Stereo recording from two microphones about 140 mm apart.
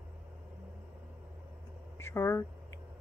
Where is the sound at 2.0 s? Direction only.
20° left (ahead or behind).